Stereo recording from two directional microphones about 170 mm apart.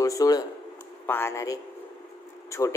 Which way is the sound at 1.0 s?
15° left (ahead or behind).